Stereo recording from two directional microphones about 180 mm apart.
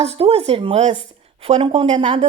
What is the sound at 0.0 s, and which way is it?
A woman's voice, 35° right (ahead or behind).